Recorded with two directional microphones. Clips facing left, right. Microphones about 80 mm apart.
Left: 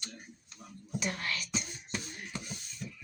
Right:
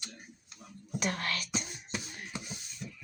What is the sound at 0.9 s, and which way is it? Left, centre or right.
Speech, right.